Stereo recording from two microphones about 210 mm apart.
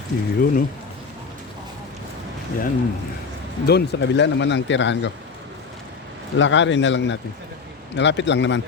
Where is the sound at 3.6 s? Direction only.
55° left (ahead or behind).